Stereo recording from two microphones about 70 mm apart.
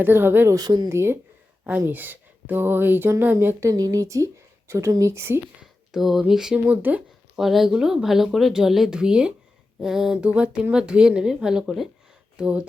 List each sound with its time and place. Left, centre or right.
0.0 s a woman's voice: right
0.5 s speech: right
0.9 s a woman's voice: right
1.9 s speech: right
3.6 s speech: right
5.9 s speech: centre
6.7 s speech: right
7.3 s speech: centre
10.2 s speech: centre